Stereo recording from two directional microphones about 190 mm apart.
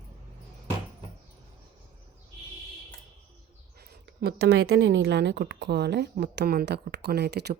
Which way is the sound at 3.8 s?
55° right (ahead or behind).